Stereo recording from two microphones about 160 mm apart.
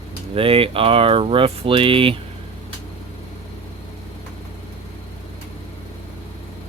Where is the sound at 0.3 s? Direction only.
35° right (ahead or behind).